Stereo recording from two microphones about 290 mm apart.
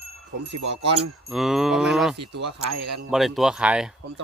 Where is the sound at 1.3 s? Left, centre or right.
Centre.